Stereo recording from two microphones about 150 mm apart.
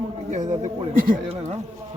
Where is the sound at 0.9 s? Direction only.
65° right (ahead or behind).